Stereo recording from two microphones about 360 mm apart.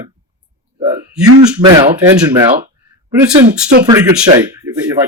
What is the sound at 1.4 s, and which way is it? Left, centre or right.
Speech, centre.